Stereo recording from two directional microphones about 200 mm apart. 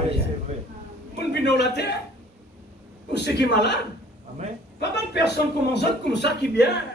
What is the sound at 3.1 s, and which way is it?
Speech, 60° left (ahead or behind).